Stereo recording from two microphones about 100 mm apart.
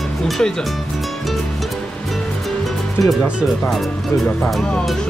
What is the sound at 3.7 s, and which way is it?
Speech, centre (ahead or behind).